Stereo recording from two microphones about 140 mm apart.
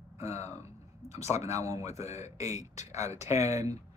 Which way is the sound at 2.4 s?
25° right (ahead or behind).